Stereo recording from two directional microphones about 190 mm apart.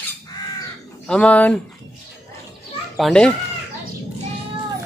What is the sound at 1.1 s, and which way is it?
Speech, 5° left (ahead or behind).